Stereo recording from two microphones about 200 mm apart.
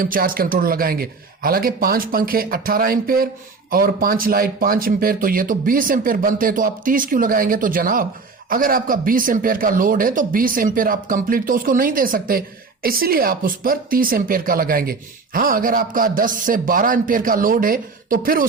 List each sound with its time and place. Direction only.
0.0 s a woman's voice: 45° right (ahead or behind)